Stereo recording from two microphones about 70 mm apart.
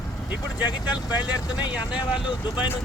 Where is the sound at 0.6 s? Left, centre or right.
Left.